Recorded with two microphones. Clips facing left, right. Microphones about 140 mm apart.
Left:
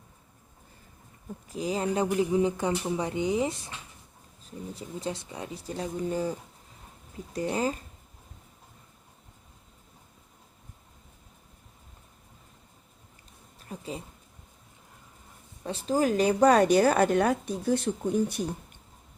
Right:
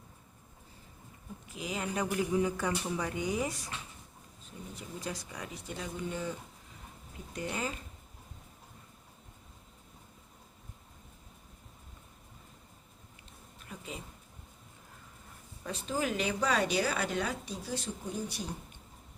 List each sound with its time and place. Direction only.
1.5 s speech: 35° left (ahead or behind)
7.3 s speech: 35° left (ahead or behind)
13.6 s a sound: 35° left (ahead or behind)
15.6 s speech: 35° left (ahead or behind); by 18.4 s 55° left (ahead or behind)